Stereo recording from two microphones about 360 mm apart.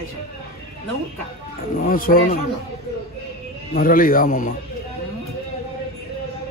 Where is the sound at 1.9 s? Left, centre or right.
Left.